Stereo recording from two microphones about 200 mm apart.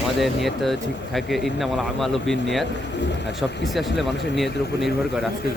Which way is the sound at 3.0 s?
60° left (ahead or behind).